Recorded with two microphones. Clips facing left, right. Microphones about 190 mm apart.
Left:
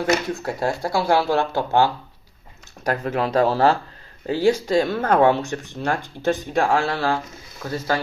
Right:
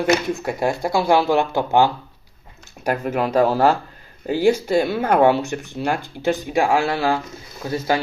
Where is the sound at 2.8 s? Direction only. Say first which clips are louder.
Right 1 dB; 5° right (ahead or behind).